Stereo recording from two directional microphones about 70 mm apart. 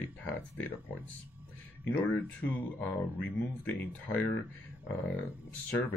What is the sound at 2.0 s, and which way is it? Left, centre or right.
Speech, left.